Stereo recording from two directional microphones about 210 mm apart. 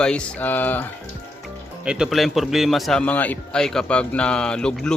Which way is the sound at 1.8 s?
5° right (ahead or behind).